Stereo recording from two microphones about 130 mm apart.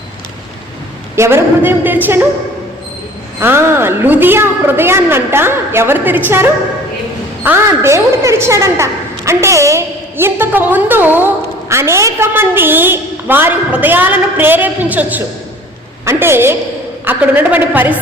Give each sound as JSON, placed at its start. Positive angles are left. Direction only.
{"t": 1.1, "sound": "a woman's voice", "side_deg": -20}
{"t": 3.4, "sound": "a woman's voice", "side_deg": -20}